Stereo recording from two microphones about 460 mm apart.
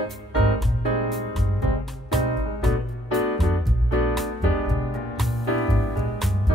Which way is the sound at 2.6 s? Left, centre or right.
Centre.